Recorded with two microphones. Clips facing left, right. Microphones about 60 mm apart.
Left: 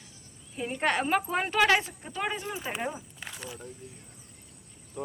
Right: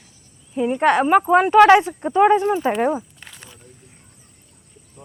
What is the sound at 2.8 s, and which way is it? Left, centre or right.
Speech, right.